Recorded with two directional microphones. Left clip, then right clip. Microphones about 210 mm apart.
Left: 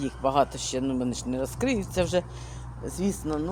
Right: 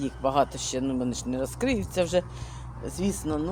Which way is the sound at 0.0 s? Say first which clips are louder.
Left 1 dB; 10° left (ahead or behind).